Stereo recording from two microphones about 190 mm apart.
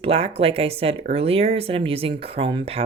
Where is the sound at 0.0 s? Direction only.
30° right (ahead or behind).